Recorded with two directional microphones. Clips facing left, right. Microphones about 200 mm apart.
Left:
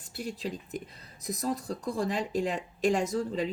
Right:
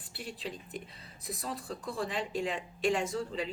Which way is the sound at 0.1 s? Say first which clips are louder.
Left 6 dB; 45° left (ahead or behind).